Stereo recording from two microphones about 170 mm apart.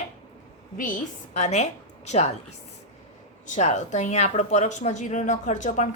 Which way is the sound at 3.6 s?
45° left (ahead or behind).